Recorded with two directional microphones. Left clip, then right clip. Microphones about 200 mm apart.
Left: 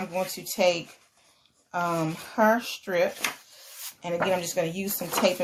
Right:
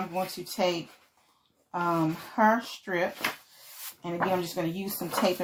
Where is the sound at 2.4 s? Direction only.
35° left (ahead or behind).